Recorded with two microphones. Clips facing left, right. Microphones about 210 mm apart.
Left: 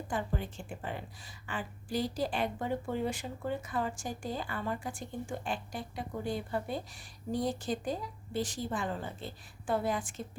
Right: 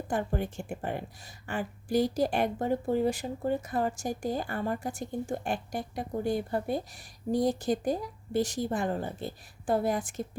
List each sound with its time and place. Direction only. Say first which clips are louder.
0.1 s speech: right 5 dB; 45° right (ahead or behind)